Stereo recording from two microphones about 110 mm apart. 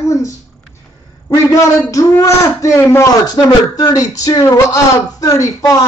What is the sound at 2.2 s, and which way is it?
Speech, 30° left (ahead or behind).